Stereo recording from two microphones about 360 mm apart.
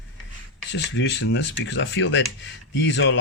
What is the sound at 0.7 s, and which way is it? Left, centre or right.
Speech, left.